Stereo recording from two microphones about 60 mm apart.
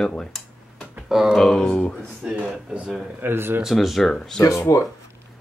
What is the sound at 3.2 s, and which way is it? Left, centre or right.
Speech, right.